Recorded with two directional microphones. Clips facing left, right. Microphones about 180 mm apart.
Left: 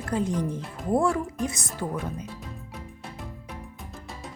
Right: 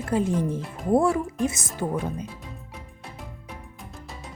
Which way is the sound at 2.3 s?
Centre (ahead or behind).